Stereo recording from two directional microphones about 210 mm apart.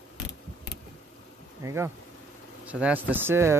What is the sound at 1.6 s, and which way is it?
Insect, 15° right (ahead or behind).